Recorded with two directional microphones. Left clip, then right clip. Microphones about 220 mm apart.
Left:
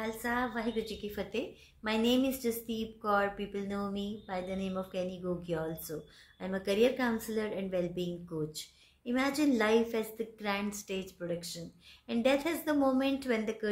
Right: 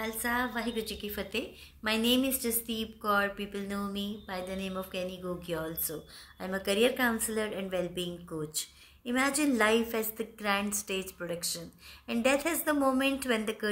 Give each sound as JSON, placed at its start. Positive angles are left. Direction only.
{"t": 0.0, "sound": "a woman's voice", "side_deg": -5}